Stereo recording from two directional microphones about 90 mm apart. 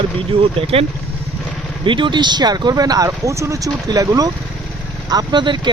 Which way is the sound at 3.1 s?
35° right (ahead or behind).